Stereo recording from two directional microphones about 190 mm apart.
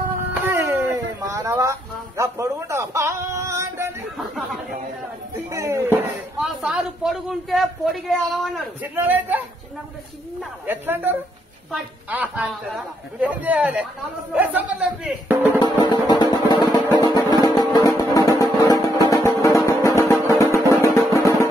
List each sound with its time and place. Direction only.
0.4 s a sound: 10° right (ahead or behind)
5.3 s a man's voice: 15° right (ahead or behind)
6.4 s a man's voice: centre (ahead or behind)
8.9 s a man's voice: 10° right (ahead or behind)
10.7 s a man's voice: 10° right (ahead or behind)
15.6 s music: 20° left (ahead or behind)